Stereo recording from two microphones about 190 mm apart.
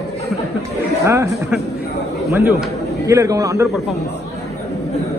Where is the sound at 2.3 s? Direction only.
10° right (ahead or behind).